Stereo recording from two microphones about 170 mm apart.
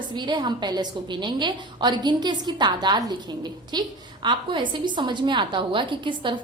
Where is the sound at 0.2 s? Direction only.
25° right (ahead or behind).